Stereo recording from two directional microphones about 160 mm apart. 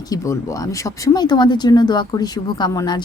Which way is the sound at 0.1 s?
20° left (ahead or behind).